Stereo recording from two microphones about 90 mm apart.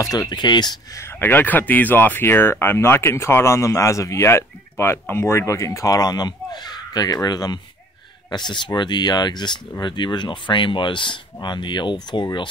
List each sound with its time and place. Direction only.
0.0 s speech: 40° left (ahead or behind)
0.3 s speech: 55° left (ahead or behind)
0.9 s speech: 25° left (ahead or behind); by 12.3 s 60° left (ahead or behind)